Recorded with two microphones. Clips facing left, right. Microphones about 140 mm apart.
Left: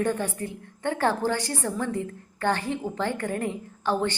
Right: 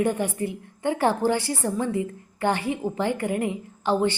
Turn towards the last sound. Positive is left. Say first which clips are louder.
# right 3 dB
turn(degrees=-15)  # may be behind; listen again after turning